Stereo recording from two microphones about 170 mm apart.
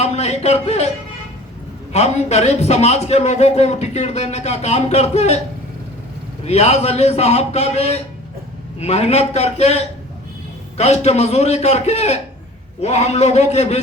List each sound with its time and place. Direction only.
0.0 s speech: 40° left (ahead or behind)
1.9 s a man's voice: 40° left (ahead or behind)
6.4 s a man's voice: 40° left (ahead or behind)